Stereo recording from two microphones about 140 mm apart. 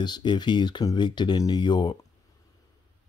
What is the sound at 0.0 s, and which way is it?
Speech, 30° left (ahead or behind).